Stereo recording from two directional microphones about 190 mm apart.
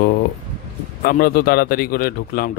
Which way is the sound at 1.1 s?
50° left (ahead or behind).